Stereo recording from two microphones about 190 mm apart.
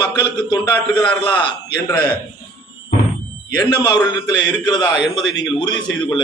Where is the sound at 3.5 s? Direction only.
25° left (ahead or behind).